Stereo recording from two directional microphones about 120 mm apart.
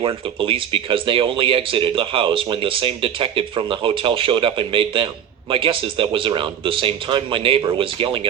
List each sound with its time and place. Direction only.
0.3 s speech: 45° right (ahead or behind)